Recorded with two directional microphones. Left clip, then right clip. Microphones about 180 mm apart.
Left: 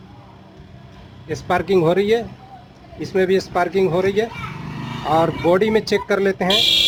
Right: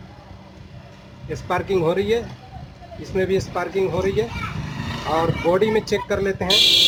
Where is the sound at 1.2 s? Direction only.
50° left (ahead or behind).